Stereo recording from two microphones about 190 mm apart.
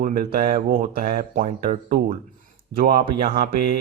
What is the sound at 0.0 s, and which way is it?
Speech, 45° right (ahead or behind).